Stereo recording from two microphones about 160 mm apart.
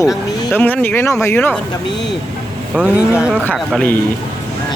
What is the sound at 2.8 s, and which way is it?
Speech, 10° right (ahead or behind).